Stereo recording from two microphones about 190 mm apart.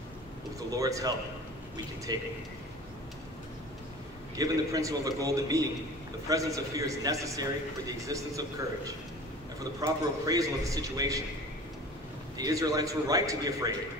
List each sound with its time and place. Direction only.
0.7 s a man's voice: 15° right (ahead or behind)
4.4 s a man's voice: 15° right (ahead or behind)
12.4 s a man's voice: 20° right (ahead or behind)